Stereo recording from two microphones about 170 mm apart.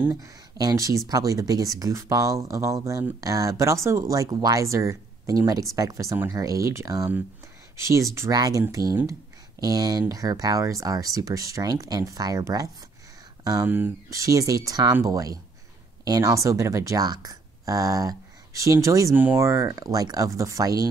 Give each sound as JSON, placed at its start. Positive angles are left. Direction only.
{"t": 0.2, "sound": "speech", "side_deg": -20}